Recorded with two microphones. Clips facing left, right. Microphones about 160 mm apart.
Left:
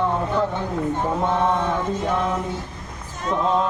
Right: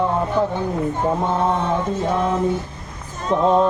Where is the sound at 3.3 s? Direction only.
30° right (ahead or behind).